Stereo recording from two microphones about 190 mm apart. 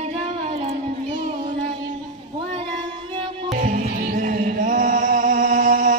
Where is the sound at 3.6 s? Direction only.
45° right (ahead or behind).